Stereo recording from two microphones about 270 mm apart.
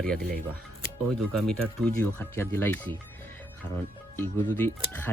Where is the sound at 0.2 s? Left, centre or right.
Right.